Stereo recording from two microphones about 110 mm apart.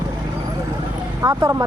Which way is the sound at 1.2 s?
30° right (ahead or behind).